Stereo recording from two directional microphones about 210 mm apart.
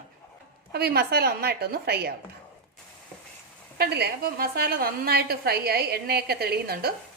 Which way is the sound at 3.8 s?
50° right (ahead or behind).